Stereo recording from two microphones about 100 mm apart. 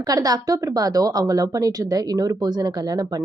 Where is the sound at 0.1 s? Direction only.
40° right (ahead or behind).